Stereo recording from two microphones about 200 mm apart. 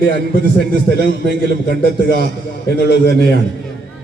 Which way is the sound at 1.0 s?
55° left (ahead or behind).